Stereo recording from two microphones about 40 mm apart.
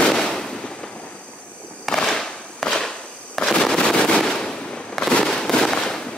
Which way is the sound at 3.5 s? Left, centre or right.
Centre.